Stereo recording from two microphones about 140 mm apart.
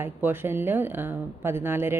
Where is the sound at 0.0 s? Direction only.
15° right (ahead or behind).